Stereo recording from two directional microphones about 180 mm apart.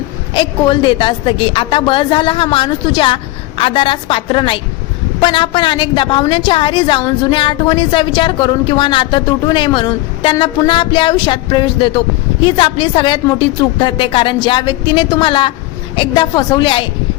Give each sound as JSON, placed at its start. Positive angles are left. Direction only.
{"t": 0.3, "sound": "a woman's voice", "side_deg": 25}